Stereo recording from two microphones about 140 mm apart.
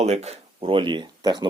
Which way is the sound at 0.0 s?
50° right (ahead or behind).